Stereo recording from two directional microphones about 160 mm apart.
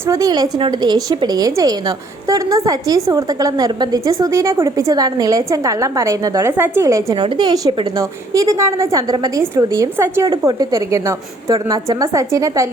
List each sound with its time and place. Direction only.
0.1 s a woman's voice: 25° right (ahead or behind)